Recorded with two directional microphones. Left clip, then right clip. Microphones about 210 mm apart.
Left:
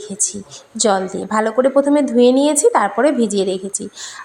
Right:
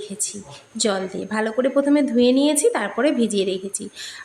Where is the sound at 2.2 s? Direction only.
10° left (ahead or behind).